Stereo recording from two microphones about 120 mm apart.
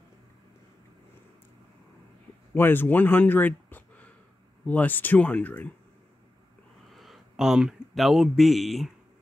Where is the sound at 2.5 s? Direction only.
15° left (ahead or behind).